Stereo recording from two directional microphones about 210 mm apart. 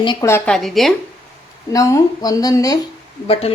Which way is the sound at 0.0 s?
15° left (ahead or behind).